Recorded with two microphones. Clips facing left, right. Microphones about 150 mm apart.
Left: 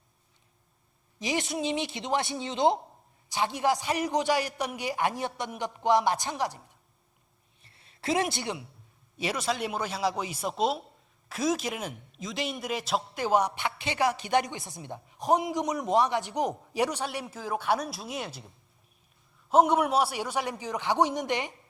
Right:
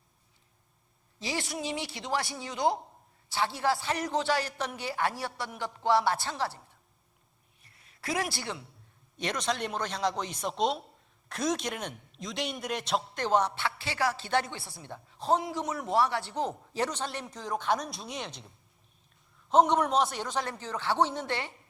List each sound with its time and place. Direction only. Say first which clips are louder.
1.2 s a man's voice: left 4 dB; 20° left (ahead or behind)
7.6 s a sound: left 5 dB; 30° left (ahead or behind)
9.1 s a man's voice: left 2 dB; 5° left (ahead or behind)